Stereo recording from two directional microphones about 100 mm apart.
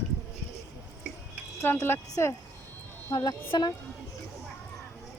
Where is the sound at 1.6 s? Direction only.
25° left (ahead or behind).